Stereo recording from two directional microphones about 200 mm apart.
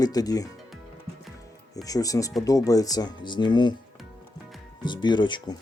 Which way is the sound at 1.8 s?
15° left (ahead or behind).